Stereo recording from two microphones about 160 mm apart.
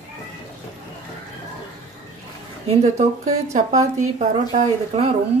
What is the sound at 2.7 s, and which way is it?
A woman's voice, 40° right (ahead or behind).